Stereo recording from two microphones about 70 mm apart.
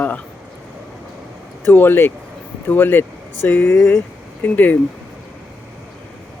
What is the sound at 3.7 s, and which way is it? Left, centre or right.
Speech, left.